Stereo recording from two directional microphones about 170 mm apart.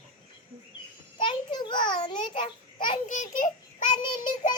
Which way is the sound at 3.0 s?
45° left (ahead or behind).